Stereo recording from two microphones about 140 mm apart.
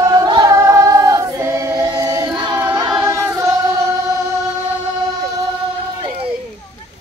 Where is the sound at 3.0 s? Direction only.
20° right (ahead or behind).